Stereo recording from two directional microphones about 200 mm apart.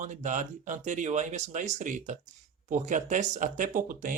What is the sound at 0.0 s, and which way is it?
Speech, 40° right (ahead or behind).